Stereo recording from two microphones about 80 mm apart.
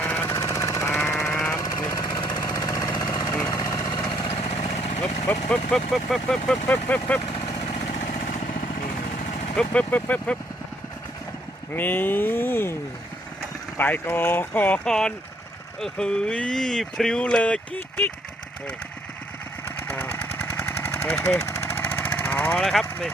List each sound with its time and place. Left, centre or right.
0.0 s jackhammer: left
0.3 s jackhammer: left
1.5 s jackhammer: left
5.3 s speech: left
5.7 s speech: centre
6.7 s speech: centre
9.6 s speech: centre
11.7 s speech: left
13.7 s speech: left
14.8 s speech: centre
19.9 s engine: left
21.2 s vehicle: left
22.6 s speech: centre